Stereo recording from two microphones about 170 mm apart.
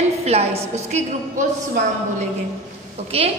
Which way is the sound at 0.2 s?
40° right (ahead or behind).